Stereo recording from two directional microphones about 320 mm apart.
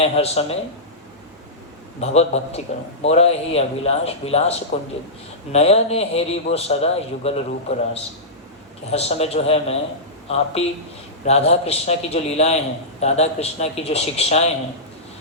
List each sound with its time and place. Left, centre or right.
0.0 s a man's voice: centre
2.0 s a man's voice: centre